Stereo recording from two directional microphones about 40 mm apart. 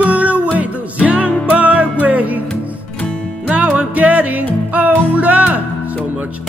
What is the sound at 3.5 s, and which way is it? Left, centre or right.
Music, right.